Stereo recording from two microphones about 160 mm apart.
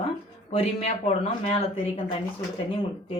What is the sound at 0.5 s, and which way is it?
Speech, 40° left (ahead or behind).